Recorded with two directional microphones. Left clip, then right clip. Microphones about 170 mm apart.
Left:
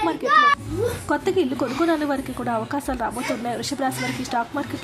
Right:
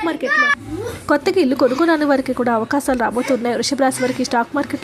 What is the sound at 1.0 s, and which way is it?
A woman's voice, 30° right (ahead or behind).